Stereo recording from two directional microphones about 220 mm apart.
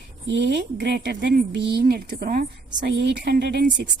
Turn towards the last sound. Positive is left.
turn(degrees=-50)  # may be behind; listen again after turning